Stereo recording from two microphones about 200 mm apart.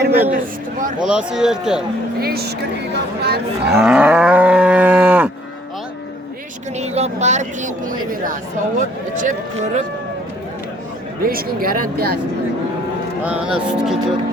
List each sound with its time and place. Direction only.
0.0 s speech: 50° right (ahead or behind)
1.0 s speech: 5° right (ahead or behind)
2.2 s speech: 50° right (ahead or behind)
3.7 s moo: 5° right (ahead or behind)
6.7 s speech: 35° right (ahead or behind)
11.2 s speech: 45° right (ahead or behind)
13.2 s speech: 5° right (ahead or behind)